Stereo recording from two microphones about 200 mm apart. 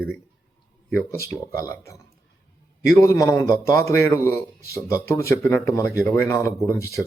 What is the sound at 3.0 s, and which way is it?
Speech, 15° left (ahead or behind).